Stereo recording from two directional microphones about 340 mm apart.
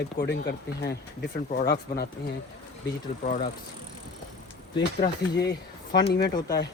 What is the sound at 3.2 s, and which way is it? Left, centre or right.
Speech, left.